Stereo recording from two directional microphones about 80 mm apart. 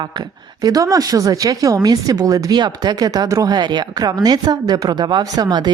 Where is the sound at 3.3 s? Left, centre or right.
Right.